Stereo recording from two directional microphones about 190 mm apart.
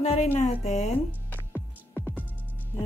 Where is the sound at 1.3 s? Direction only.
10° left (ahead or behind).